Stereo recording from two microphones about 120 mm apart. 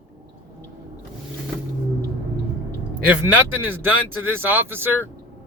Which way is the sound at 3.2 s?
15° right (ahead or behind).